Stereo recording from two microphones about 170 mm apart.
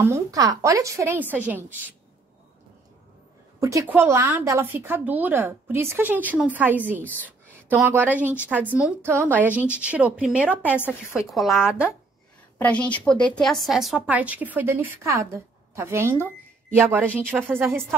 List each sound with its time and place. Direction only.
0.0 s a woman's voice: 20° right (ahead or behind)
3.5 s a woman's voice: 15° right (ahead or behind); by 11.9 s centre (ahead or behind)
12.5 s a woman's voice: 10° left (ahead or behind); by 16.3 s 15° right (ahead or behind)
17.0 s a woman's voice: 10° left (ahead or behind)
17.6 s a woman's voice: 10° right (ahead or behind)